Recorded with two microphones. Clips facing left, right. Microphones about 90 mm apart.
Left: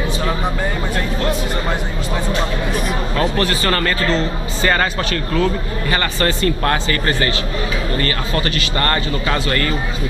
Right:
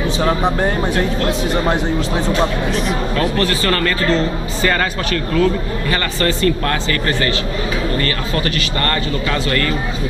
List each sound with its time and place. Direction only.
2.7 s speech: 10° left (ahead or behind)
5.4 s speech: 10° left (ahead or behind)
8.7 s speech: 15° left (ahead or behind)